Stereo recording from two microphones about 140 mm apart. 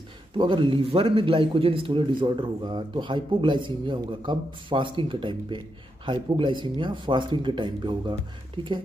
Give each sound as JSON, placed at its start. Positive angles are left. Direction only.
{"t": 0.4, "sound": "a man's voice", "side_deg": -35}